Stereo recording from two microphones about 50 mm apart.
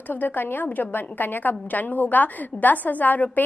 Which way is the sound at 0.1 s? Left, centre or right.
Left.